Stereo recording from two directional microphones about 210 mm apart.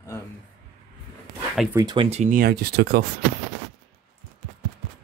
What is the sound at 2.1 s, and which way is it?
Speech, 35° right (ahead or behind).